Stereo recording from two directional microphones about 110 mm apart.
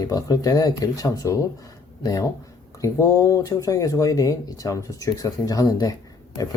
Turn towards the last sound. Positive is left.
turn(degrees=35)  # may be behind; listen again after turning